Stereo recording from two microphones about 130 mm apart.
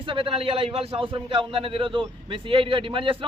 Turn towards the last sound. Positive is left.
turn(degrees=-40)  # may be behind; listen again after turning